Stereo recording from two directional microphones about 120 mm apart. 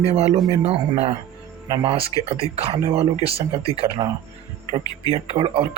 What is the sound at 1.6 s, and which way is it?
Speech, 45° right (ahead or behind).